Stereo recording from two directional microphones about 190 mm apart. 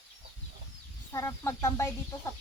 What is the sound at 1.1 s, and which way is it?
Speech, 15° left (ahead or behind).